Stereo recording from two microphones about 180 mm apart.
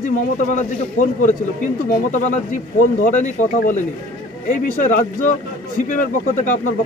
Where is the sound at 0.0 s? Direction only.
45° left (ahead or behind).